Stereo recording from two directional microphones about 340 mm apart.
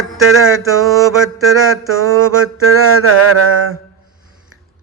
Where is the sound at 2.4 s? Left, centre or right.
Right.